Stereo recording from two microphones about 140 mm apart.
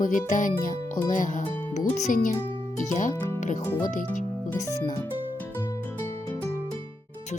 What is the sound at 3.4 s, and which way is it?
Music, 60° left (ahead or behind).